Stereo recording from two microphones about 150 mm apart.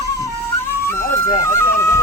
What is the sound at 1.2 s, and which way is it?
Speech, 70° left (ahead or behind).